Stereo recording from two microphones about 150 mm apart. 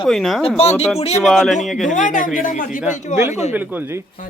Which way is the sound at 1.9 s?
60° left (ahead or behind).